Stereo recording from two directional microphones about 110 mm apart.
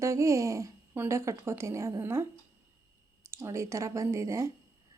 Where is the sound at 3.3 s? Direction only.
25° right (ahead or behind).